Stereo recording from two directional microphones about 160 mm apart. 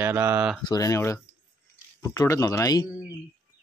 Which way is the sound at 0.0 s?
15° right (ahead or behind).